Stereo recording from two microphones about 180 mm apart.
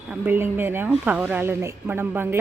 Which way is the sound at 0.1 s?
10° right (ahead or behind).